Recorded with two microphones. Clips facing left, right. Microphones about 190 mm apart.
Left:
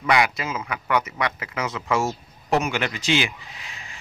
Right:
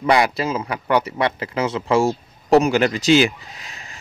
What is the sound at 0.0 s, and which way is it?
A man's voice, 35° right (ahead or behind).